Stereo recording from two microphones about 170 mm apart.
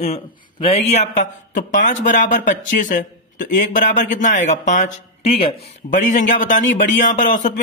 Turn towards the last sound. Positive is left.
turn(degrees=50)  # may be behind; listen again after turning